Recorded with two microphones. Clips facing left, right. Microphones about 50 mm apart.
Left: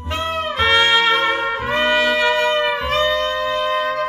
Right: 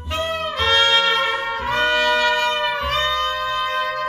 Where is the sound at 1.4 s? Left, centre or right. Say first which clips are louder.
Left 2 dB; centre.